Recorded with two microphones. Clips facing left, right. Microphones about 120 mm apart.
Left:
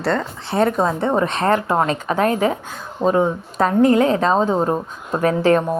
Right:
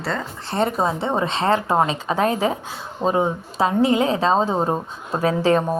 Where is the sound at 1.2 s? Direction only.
50° left (ahead or behind).